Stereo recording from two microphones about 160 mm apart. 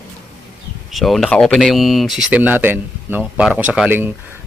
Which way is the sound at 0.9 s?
Centre (ahead or behind).